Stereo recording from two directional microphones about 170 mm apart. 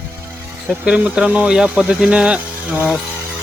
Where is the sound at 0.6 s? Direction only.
5° right (ahead or behind).